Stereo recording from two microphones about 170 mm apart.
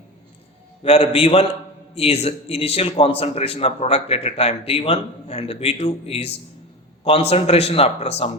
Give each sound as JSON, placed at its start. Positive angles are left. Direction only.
{"t": 0.8, "sound": "a man's voice", "side_deg": 35}